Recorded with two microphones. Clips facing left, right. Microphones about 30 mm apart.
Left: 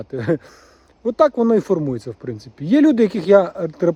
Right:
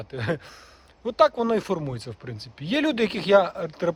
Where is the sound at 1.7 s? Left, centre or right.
Right.